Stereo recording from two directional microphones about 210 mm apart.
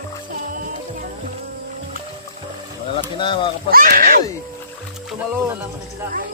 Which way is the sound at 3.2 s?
25° left (ahead or behind).